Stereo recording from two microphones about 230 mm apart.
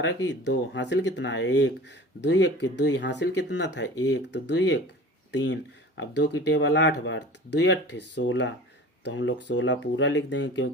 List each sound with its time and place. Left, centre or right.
0.0 s speech: left